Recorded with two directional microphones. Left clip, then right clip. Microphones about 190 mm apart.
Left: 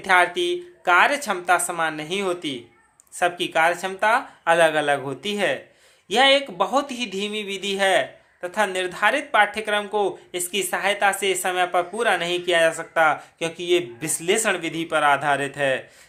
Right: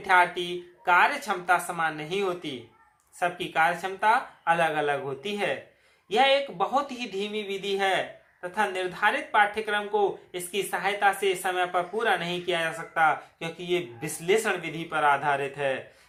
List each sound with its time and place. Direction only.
0.0 s speech: 45° left (ahead or behind)